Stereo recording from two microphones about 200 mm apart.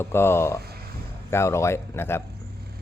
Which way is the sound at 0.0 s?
10° left (ahead or behind).